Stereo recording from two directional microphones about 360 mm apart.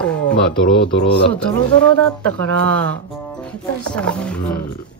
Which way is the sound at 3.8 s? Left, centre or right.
Centre.